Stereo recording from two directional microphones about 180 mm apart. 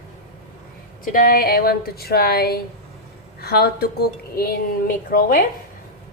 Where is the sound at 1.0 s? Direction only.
50° left (ahead or behind).